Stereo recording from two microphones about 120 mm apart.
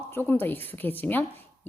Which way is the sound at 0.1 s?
20° left (ahead or behind).